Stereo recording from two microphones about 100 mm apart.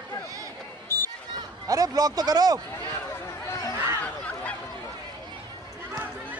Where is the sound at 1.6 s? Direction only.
40° right (ahead or behind).